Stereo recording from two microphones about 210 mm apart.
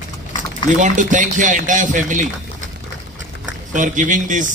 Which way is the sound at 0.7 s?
35° right (ahead or behind).